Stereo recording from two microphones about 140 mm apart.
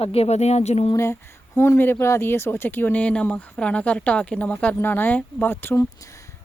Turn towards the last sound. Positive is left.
turn(degrees=15)  # may be behind; listen again after turning